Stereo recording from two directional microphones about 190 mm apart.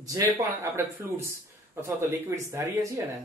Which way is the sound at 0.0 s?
20° right (ahead or behind).